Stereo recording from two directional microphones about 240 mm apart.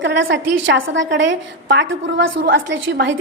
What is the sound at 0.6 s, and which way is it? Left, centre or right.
A woman's voice, right.